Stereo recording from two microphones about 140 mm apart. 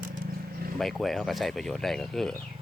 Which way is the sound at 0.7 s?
Centre (ahead or behind).